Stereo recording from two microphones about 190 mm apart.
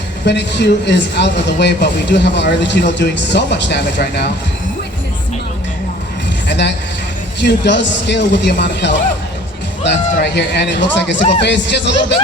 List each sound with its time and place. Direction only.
0.3 s speech: 65° left (ahead or behind)
6.5 s a man's voice: 65° left (ahead or behind)